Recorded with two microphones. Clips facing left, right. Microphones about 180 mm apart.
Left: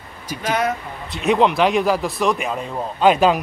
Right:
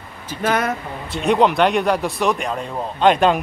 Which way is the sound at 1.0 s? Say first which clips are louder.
Right 1 dB; centre (ahead or behind).